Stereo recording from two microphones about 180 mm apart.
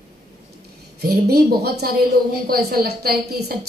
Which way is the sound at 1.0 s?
60° right (ahead or behind).